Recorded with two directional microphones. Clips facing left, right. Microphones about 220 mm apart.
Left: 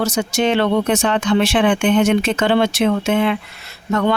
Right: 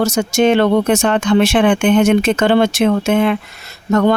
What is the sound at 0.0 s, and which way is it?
Speech, 45° right (ahead or behind).